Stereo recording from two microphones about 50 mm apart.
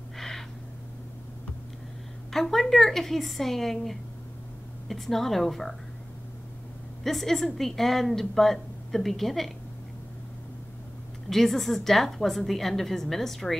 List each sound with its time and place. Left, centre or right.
0.2 s owl: centre
2.3 s a woman's voice: centre
7.0 s a woman's voice: centre
11.2 s a woman's voice: centre